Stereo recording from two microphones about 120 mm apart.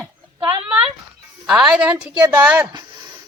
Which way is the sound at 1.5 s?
5° right (ahead or behind).